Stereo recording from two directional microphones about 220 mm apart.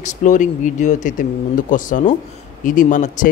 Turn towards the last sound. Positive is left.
turn(degrees=35)  # may be behind; listen again after turning